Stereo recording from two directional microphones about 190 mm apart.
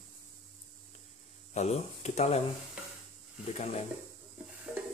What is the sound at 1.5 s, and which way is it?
Speech, 35° left (ahead or behind).